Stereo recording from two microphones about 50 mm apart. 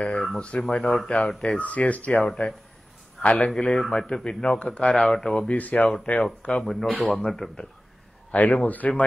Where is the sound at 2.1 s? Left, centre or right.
Centre.